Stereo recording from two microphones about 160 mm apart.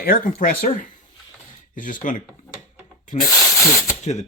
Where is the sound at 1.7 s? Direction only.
55° left (ahead or behind).